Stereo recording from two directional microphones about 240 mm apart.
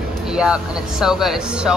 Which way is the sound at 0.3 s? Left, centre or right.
Centre.